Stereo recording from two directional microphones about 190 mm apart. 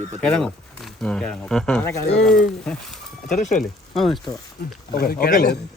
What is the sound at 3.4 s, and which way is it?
Speech, 40° left (ahead or behind).